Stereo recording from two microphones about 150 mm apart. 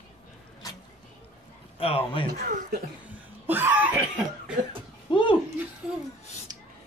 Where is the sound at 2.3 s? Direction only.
90° right.